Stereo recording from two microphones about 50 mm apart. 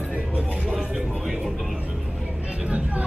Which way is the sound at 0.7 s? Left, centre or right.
Centre.